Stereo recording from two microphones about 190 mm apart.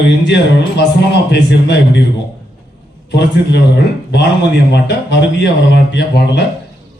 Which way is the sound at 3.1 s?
65° left (ahead or behind).